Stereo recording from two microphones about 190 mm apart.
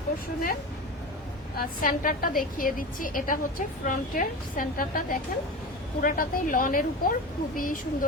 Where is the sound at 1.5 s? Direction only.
50° left (ahead or behind).